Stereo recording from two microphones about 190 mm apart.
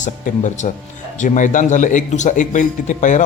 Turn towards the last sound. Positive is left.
turn(degrees=40)  # may be behind; listen again after turning